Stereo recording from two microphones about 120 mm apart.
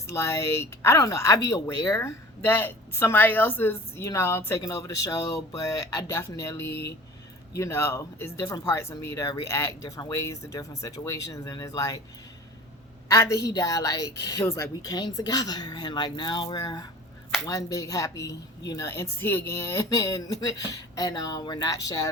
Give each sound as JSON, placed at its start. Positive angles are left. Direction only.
{"t": 0.1, "sound": "speech", "side_deg": 25}
{"t": 13.1, "sound": "a woman's voice", "side_deg": 25}